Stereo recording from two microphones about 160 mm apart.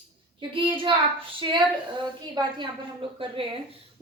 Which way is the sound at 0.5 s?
30° right (ahead or behind).